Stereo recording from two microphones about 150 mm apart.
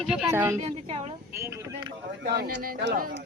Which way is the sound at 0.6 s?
45° right (ahead or behind).